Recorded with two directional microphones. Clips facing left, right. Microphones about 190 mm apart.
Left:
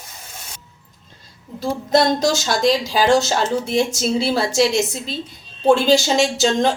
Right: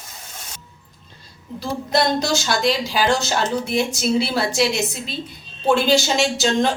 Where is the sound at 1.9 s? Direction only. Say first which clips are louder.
Left 3 dB; 45° left (ahead or behind).